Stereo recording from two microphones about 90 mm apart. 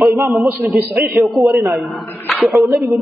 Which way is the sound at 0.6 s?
20° right (ahead or behind).